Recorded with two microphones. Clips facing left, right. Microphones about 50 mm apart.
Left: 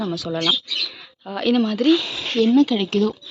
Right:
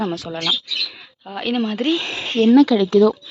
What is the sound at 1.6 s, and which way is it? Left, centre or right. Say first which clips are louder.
Speech: left 3 dB; right.